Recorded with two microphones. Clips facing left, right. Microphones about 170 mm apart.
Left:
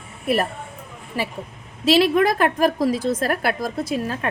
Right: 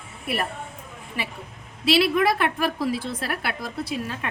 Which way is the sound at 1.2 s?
40° left (ahead or behind).